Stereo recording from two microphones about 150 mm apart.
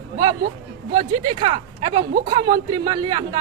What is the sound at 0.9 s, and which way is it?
A man's voice, 35° right (ahead or behind).